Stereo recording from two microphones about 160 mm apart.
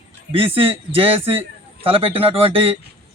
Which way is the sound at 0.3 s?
35° right (ahead or behind).